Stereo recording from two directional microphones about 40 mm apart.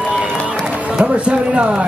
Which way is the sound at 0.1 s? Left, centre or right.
Right.